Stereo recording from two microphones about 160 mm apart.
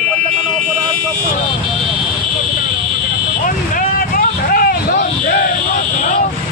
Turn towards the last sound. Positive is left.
turn(degrees=65)  # may be behind; listen again after turning